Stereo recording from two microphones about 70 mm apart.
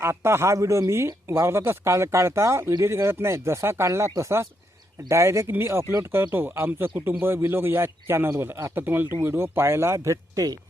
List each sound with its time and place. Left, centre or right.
0.0 s speech: right